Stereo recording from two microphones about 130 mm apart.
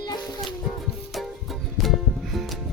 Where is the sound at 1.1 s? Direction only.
Centre (ahead or behind).